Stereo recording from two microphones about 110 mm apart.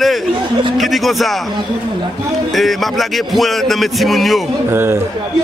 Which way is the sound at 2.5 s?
Centre (ahead or behind).